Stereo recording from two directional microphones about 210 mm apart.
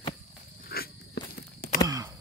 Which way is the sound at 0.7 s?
50° left (ahead or behind).